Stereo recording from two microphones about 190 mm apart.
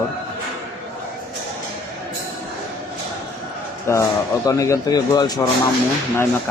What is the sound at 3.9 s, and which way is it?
Speech, 15° left (ahead or behind).